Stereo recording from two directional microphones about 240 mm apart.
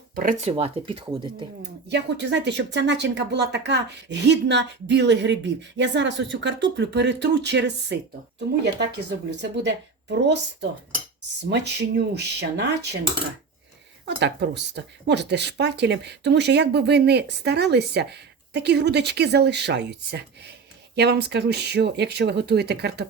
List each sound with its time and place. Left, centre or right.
0.2 s speech: right
0.5 s speech: right
1.9 s speech: right
9.3 s speech: right
14.2 s speech: right